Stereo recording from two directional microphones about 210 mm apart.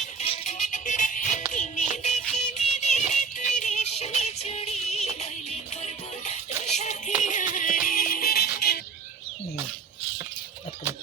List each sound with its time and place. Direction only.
0.2 s music: 35° left (ahead or behind)